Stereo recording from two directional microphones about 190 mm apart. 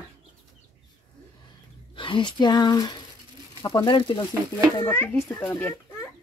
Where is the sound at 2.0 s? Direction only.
25° left (ahead or behind).